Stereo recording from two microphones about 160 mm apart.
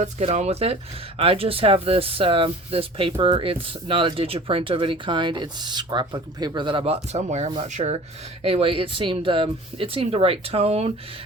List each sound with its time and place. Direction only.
0.0 s speech: 45° right (ahead or behind)
8.4 s speech: 40° right (ahead or behind)